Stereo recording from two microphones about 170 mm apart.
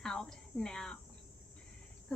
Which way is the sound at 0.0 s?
5° left (ahead or behind).